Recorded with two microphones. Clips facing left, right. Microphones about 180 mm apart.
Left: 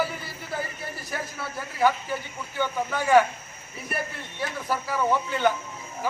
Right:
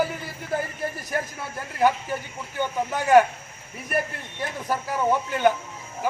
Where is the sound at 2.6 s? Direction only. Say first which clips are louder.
Right 1 dB; 15° right (ahead or behind).